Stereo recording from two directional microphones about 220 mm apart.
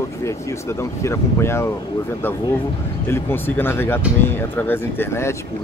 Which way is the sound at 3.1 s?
10° left (ahead or behind).